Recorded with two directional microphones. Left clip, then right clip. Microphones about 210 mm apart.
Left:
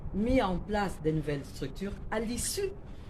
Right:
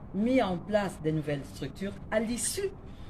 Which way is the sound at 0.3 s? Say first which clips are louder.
Right 2 dB; 5° left (ahead or behind).